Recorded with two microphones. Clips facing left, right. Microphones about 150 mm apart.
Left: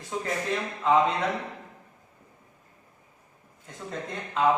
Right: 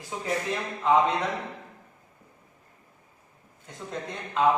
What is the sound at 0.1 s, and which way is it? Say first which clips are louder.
Speech: left 3 dB; 5° right (ahead or behind).